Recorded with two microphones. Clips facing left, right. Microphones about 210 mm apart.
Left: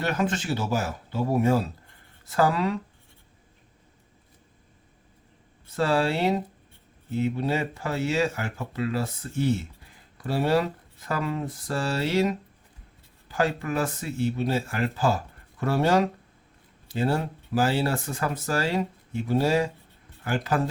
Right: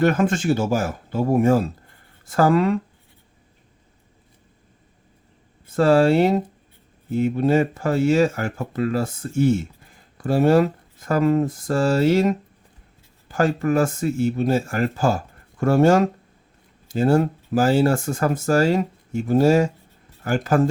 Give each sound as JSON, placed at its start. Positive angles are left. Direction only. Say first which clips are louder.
{"t": 0.0, "sound": "speech", "louder": "right 8 dB", "side_deg": -50}
{"t": 5.7, "sound": "speech", "louder": "right 9 dB", "side_deg": -45}